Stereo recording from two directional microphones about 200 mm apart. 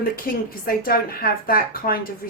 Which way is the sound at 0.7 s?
50° left (ahead or behind).